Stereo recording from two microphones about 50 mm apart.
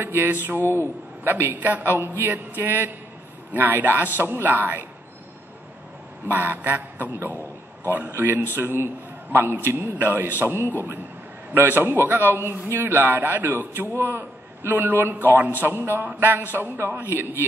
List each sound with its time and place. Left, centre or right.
0.0 s a man's voice: right
1.9 s a man's voice: right
6.2 s a man's voice: right
8.1 s a man's voice: right
16.5 s a man's voice: right